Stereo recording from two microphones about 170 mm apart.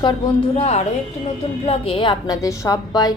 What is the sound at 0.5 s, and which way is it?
A woman's voice, 40° left (ahead or behind).